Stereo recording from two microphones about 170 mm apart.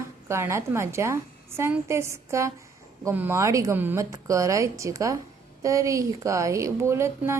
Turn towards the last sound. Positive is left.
turn(degrees=-15)  # may be behind; listen again after turning